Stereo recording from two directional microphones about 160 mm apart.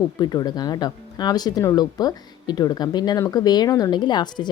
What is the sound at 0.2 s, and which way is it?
A woman's voice, 25° left (ahead or behind).